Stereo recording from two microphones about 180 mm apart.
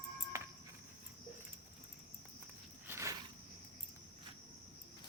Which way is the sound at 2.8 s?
15° right (ahead or behind).